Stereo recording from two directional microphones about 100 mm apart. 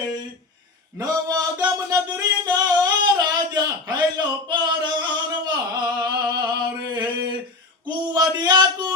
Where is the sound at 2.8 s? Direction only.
45° right (ahead or behind).